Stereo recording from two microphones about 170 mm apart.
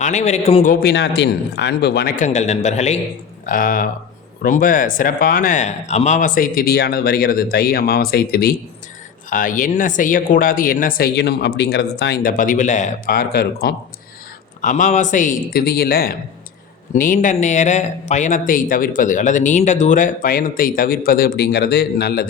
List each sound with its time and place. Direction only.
0.0 s speech: 45° left (ahead or behind)
0.7 s speech: 65° left (ahead or behind)
2.1 s a man's voice: 45° left (ahead or behind)
3.4 s speech: 55° left (ahead or behind)
9.3 s speech: 50° left (ahead or behind)
13.1 s speech: 65° left (ahead or behind)
14.6 s speech: 50° left (ahead or behind)
16.9 s speech: 50° left (ahead or behind); by 22.3 s 75° left (ahead or behind)